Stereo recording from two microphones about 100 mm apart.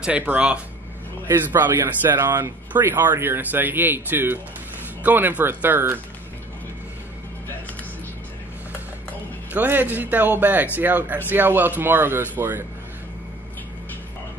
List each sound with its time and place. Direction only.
0.0 s speech: 15° right (ahead or behind)
9.5 s speech: 20° right (ahead or behind)